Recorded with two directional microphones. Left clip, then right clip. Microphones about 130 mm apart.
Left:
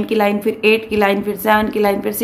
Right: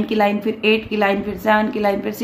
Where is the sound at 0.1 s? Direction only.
25° left (ahead or behind).